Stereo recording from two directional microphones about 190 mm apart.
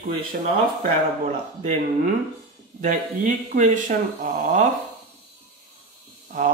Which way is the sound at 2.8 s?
40° right (ahead or behind).